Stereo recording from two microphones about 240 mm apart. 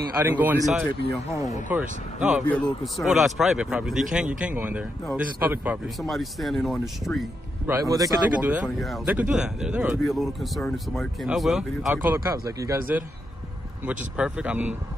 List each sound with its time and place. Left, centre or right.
0.1 s a man's voice: centre
7.6 s a man's voice: centre